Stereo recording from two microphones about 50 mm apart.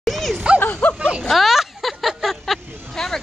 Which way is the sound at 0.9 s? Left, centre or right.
Right.